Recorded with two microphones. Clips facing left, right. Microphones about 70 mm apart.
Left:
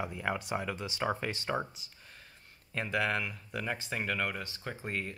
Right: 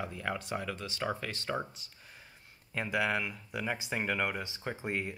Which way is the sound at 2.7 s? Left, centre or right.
Centre.